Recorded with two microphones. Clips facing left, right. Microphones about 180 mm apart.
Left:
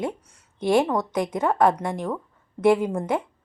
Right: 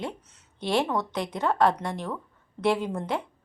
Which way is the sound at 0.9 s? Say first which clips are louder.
Left 4 dB; 50° left (ahead or behind).